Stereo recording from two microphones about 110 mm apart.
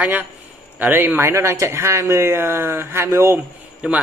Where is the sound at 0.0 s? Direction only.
15° right (ahead or behind).